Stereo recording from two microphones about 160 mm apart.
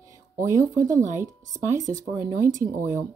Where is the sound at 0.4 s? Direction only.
20° right (ahead or behind).